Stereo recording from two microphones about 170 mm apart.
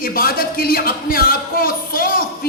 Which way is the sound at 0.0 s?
55° left (ahead or behind).